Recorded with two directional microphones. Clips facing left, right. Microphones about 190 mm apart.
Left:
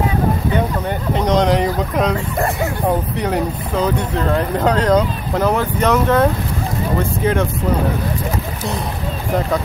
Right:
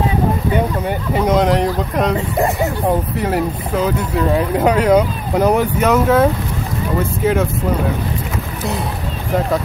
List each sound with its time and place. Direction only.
0.8 s speech: 5° right (ahead or behind)
2.1 s speech: 15° right (ahead or behind)
3.2 s speech: 5° right (ahead or behind)